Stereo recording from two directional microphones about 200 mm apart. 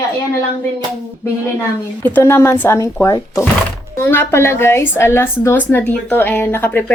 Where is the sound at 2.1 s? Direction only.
10° left (ahead or behind).